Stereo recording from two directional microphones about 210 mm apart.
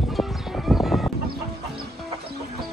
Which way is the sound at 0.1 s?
Centre (ahead or behind).